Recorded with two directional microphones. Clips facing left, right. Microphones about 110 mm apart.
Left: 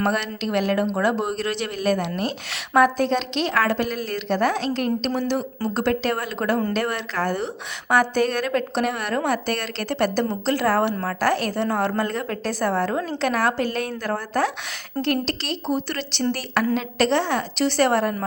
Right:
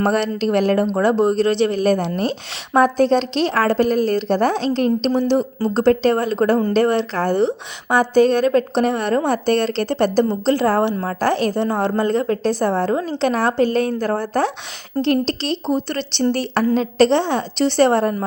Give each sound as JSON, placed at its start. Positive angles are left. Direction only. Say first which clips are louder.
{"t": 0.0, "sound": "a woman's voice", "louder": "right 6 dB", "side_deg": -35}